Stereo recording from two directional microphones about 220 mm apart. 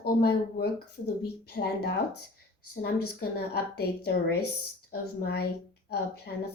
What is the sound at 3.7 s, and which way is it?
Speech, 45° left (ahead or behind).